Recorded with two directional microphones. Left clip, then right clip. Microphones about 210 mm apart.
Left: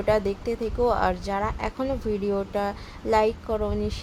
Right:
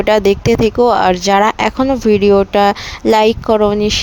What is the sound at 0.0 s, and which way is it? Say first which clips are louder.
Speech: right 13 dB; 45° right (ahead or behind).